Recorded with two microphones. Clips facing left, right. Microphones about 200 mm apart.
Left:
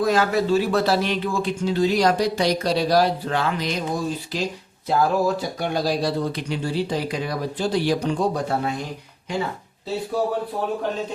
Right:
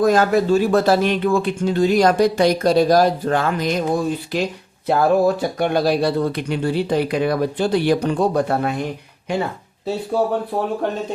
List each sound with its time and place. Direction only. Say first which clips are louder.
0.0 s speech: right 4 dB; 45° right (ahead or behind)
4.9 s speech: right 5 dB; 60° right (ahead or behind)